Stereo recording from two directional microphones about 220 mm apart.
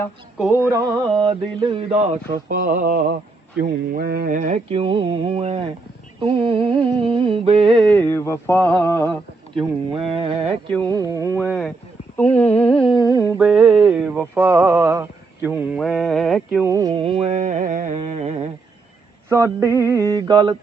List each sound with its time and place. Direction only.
0.3 s mantra: 5° right (ahead or behind); by 7.9 s 25° right (ahead or behind)
7.9 s a sound: 10° left (ahead or behind)
9.6 s mantra: 25° right (ahead or behind)
11.4 s a sound: centre (ahead or behind)
16.6 s mantra: 15° right (ahead or behind)
19.3 s mantra: 15° right (ahead or behind)